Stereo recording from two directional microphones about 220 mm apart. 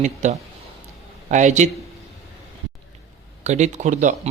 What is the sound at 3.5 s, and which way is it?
Speech, 30° right (ahead or behind).